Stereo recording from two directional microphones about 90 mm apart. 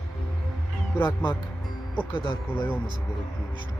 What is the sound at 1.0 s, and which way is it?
Speech, 60° left (ahead or behind).